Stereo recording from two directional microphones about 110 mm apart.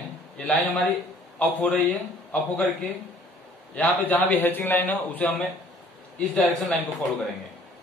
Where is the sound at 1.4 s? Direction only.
15° left (ahead or behind).